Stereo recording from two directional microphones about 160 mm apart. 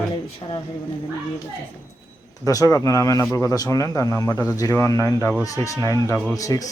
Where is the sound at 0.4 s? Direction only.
30° left (ahead or behind).